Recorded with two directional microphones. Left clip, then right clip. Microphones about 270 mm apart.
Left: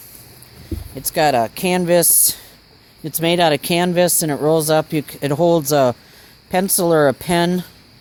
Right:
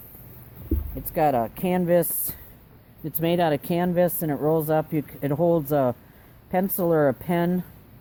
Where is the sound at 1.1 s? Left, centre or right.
Left.